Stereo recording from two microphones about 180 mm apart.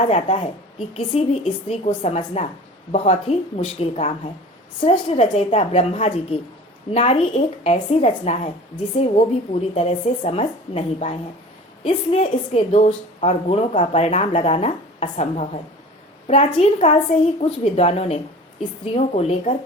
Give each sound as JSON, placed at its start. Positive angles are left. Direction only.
{"t": 0.0, "sound": "a woman's voice", "side_deg": 35}